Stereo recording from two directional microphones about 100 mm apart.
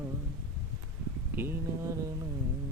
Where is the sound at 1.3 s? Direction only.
25° right (ahead or behind).